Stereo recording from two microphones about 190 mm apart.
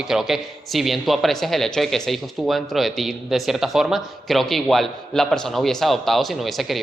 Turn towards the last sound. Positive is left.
turn(degrees=0)  # may be behind; listen again after turning